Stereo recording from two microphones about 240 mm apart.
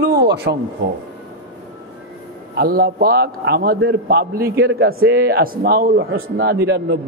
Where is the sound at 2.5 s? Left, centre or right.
Right.